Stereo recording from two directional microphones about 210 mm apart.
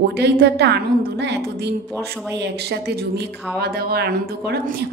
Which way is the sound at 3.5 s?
50° right (ahead or behind).